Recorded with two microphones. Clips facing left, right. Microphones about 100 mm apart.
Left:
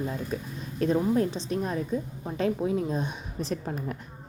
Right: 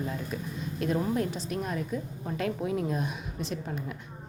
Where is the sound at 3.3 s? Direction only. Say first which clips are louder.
Left 7 dB; 40° left (ahead or behind).